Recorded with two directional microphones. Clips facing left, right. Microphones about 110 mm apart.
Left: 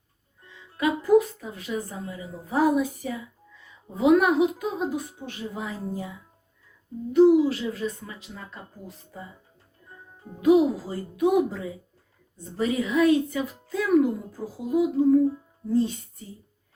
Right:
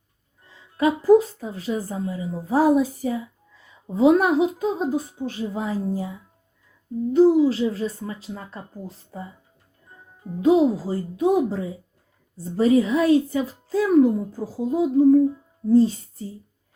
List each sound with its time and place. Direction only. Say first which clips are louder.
0.4 s a woman's voice: right 4 dB; 35° right (ahead or behind)
10.4 s a woman's voice: right 2 dB; 30° right (ahead or behind)